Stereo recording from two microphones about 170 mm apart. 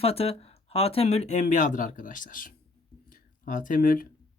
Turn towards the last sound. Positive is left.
turn(degrees=55)  # may be behind; listen again after turning